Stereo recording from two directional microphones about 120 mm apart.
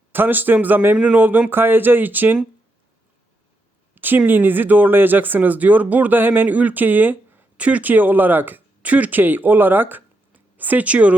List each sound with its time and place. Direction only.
0.1 s speech: 15° right (ahead or behind)
3.9 s speech: 15° right (ahead or behind)